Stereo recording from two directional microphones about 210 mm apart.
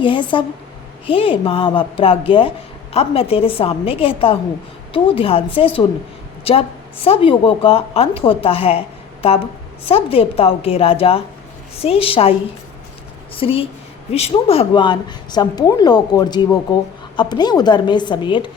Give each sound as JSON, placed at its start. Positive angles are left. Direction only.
{"t": 0.0, "sound": "a woman's voice", "side_deg": 25}
{"t": 9.9, "sound": "a woman's voice", "side_deg": 25}